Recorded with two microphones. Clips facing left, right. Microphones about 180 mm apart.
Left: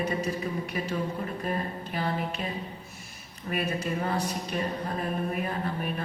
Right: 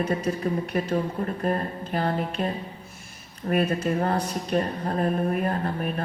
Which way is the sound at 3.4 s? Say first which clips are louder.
Right 7 dB; 50° right (ahead or behind).